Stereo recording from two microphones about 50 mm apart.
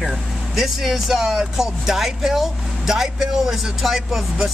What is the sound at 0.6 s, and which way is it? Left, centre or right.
Speech, centre.